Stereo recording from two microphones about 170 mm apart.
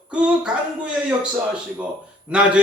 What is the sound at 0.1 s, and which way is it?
Speech, 5° right (ahead or behind).